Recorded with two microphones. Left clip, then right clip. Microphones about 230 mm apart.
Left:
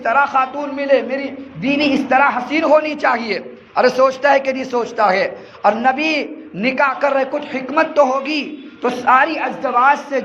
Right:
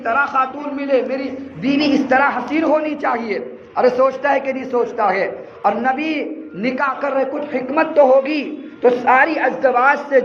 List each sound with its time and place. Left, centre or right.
0.0 s a man's voice: left